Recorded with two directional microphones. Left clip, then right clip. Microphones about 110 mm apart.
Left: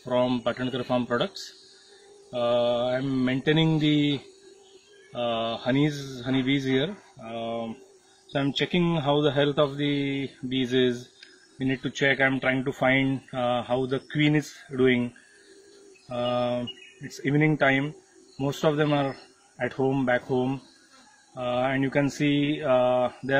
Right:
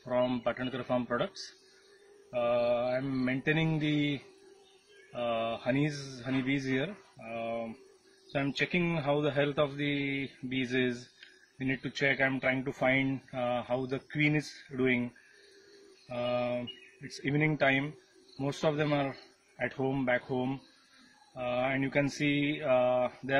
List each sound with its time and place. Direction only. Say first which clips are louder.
0.0 s speech: left 5 dB; 20° right (ahead or behind)
2.5 s speech: left 5 dB; 20° right (ahead or behind)
5.1 s speech: left 5 dB; 20° right (ahead or behind)
16.1 s speech: left 6 dB; 20° right (ahead or behind)
21.4 s speech: left 5 dB; 30° right (ahead or behind)